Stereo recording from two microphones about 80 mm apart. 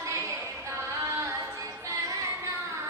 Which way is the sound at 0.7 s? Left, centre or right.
Right.